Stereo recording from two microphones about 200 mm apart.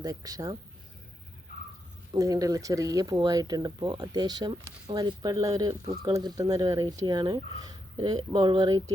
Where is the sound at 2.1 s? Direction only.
15° right (ahead or behind).